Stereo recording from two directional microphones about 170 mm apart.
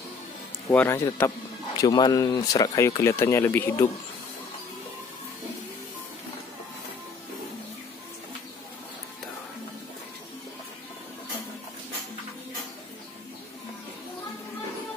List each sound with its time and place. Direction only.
0.7 s speech: 15° left (ahead or behind)